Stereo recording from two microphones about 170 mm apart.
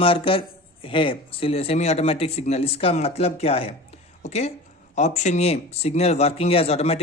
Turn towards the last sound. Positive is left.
turn(degrees=35)  # may be behind; listen again after turning